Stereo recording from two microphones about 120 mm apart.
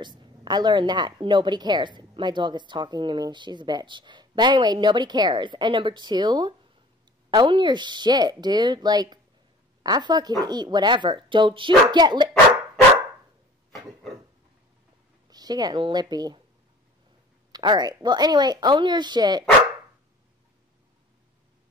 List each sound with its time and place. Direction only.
0.0 s a woman's voice: 40° right (ahead or behind)
15.2 s speech: 35° right (ahead or behind)
17.5 s a woman's voice: 35° right (ahead or behind)